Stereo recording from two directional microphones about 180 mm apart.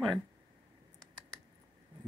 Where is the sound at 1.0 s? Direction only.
20° right (ahead or behind).